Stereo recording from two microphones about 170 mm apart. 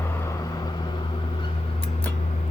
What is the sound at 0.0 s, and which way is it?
Vehicle, 15° left (ahead or behind).